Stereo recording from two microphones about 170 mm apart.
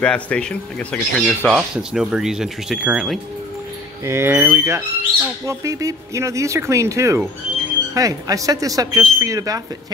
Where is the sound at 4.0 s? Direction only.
15° right (ahead or behind).